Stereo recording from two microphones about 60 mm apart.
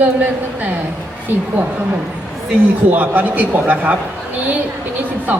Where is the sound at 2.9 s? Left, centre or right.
Right.